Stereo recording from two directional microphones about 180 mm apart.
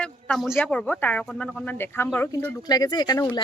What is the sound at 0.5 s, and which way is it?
Speech, 5° left (ahead or behind).